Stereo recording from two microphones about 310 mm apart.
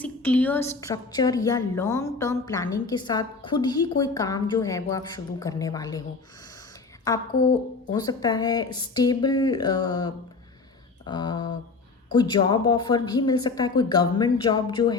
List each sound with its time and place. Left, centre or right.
0.0 s a woman's voice: centre
7.3 s a woman's voice: left
7.9 s a woman's voice: centre